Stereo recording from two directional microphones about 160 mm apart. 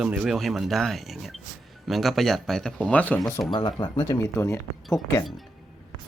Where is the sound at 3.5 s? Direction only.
25° left (ahead or behind).